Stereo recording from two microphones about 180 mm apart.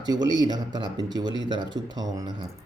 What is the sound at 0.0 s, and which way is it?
Speech, 20° right (ahead or behind).